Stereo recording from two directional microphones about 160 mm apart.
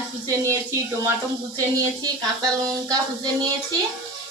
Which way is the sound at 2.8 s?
25° right (ahead or behind).